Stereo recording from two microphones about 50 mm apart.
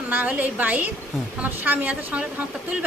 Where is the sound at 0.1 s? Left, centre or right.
Right.